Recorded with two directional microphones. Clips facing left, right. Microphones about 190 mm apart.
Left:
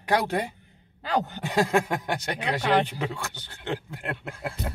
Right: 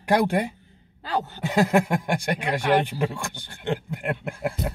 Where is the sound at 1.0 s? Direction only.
15° left (ahead or behind).